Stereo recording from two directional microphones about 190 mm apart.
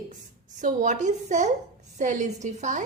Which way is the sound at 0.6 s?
40° right (ahead or behind).